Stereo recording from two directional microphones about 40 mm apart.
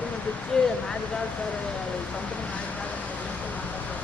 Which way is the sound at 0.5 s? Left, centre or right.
Left.